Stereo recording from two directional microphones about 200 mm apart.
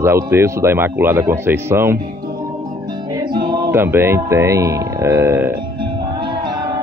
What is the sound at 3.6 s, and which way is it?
Speech, 10° right (ahead or behind).